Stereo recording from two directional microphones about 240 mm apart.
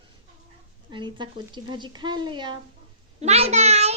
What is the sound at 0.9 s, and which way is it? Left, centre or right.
A child's voice, centre.